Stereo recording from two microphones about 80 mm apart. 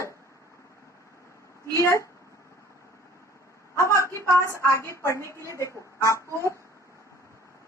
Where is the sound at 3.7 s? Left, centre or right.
Left.